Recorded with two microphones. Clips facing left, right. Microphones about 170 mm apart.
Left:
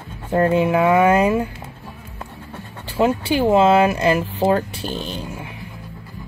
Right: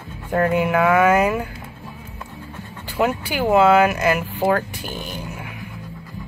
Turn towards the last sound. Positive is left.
turn(degrees=25)  # may be behind; listen again after turning